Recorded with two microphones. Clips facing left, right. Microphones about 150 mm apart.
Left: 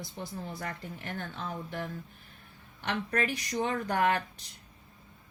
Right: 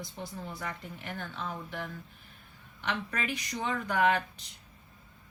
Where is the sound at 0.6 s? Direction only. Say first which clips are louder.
Left 1 dB; 45° left (ahead or behind).